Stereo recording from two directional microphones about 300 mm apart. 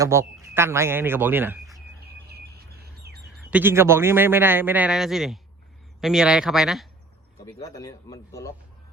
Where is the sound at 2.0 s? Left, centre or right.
Right.